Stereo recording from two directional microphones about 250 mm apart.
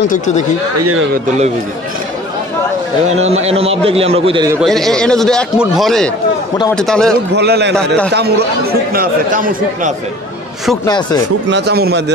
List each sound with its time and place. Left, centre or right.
0.1 s speech: left
3.1 s a man's voice: right
4.6 s a man's voice: centre
7.3 s speech: right
10.9 s speech: centre
11.4 s speech: right